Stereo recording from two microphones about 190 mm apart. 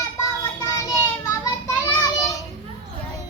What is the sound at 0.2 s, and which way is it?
Child singing, 15° left (ahead or behind).